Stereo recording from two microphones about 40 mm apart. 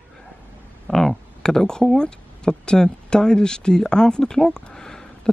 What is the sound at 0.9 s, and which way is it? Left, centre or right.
Speech, centre.